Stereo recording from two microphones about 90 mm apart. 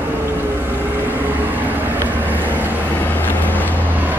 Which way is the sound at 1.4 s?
20° right (ahead or behind).